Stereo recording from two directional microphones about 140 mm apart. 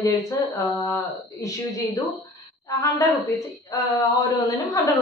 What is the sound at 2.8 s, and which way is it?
A woman's voice, 25° left (ahead or behind).